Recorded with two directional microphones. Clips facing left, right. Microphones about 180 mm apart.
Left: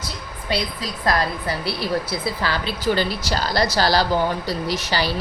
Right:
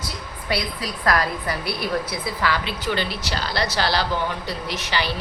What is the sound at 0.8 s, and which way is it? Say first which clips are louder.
A woman's voice: right 1 dB; 25° left (ahead or behind).